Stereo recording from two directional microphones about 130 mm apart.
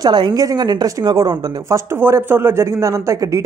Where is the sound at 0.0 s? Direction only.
35° right (ahead or behind).